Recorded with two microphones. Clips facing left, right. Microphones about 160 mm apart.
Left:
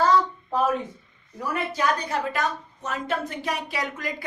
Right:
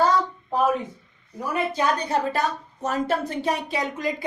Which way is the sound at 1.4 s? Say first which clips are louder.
Right 2 dB; 25° right (ahead or behind).